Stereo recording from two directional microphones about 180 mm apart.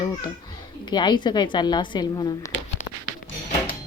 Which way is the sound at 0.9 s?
25° left (ahead or behind).